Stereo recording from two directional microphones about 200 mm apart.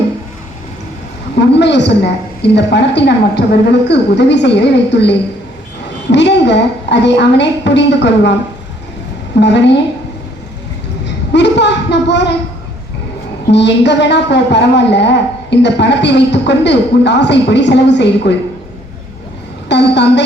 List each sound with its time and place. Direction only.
1.4 s a woman's voice: 60° left (ahead or behind)
9.4 s a woman's voice: 60° left (ahead or behind)
11.0 s a sound: 60° left (ahead or behind)
13.5 s a woman's voice: 60° left (ahead or behind)
19.6 s a woman's voice: 60° left (ahead or behind)